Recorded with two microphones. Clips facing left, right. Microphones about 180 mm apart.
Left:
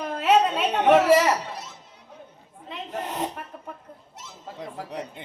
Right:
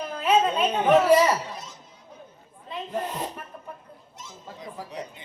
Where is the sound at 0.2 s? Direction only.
75° left (ahead or behind).